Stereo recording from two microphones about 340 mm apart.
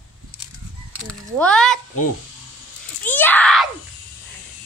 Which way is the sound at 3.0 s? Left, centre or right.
Centre.